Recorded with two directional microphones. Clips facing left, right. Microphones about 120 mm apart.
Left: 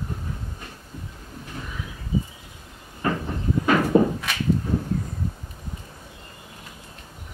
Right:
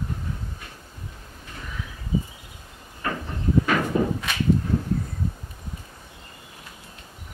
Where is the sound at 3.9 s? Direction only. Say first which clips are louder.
Left 7 dB; 30° left (ahead or behind).